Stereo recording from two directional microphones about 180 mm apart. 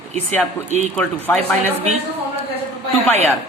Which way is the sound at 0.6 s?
40° right (ahead or behind).